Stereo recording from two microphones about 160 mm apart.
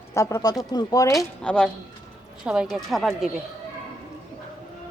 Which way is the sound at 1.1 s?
5° left (ahead or behind).